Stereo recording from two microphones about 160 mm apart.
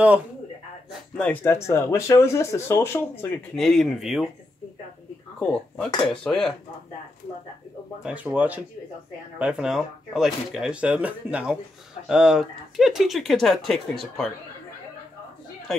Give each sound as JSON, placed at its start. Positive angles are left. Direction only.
{"t": 1.1, "sound": "speech", "side_deg": 5}
{"t": 3.5, "sound": "speech", "side_deg": 0}
{"t": 5.4, "sound": "speech", "side_deg": 5}
{"t": 8.0, "sound": "speech", "side_deg": -10}